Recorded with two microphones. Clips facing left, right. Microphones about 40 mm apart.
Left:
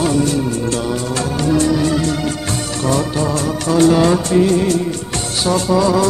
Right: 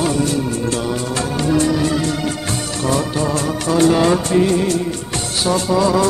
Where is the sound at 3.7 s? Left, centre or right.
Centre.